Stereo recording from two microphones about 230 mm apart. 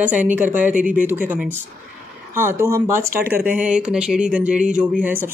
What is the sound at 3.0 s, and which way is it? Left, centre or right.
Speech, right.